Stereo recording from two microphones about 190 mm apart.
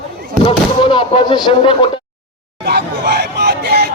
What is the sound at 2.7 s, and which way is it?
Hubbub, 60° right (ahead or behind).